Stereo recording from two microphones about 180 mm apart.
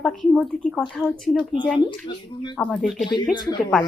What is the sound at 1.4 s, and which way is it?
Speech, 25° left (ahead or behind).